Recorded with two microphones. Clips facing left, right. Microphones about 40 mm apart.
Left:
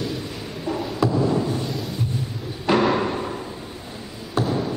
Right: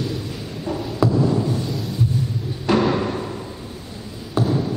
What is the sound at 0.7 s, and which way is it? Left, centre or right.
Music, centre.